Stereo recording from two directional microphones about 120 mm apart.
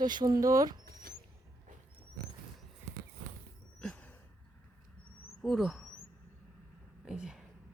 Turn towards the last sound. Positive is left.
turn(degrees=-5)  # may be behind; listen again after turning